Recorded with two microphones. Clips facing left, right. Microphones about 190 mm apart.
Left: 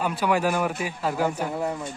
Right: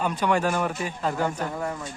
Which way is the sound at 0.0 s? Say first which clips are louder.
Even; 5° left (ahead or behind).